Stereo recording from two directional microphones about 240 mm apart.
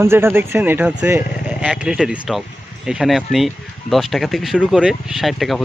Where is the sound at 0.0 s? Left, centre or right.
Centre.